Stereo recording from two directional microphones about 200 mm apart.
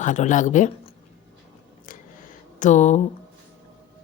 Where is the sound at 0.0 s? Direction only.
40° left (ahead or behind).